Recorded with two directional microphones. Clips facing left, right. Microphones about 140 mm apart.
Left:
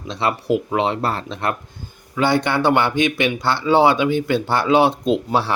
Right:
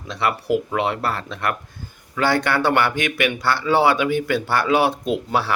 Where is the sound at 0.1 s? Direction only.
25° left (ahead or behind).